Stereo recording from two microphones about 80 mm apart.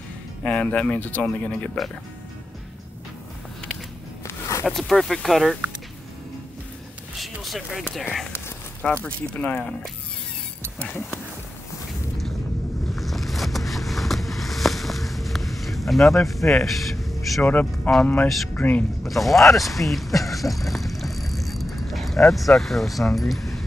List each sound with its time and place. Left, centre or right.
0.4 s speech: centre
4.3 s a sound: left
4.6 s speech: centre
7.4 s speech: centre
9.0 s speech: centre
10.8 s speech: left
12.9 s vehicle: centre
17.4 s speech: left
19.0 s speech: centre
19.5 s vehicle: centre
22.3 s speech: centre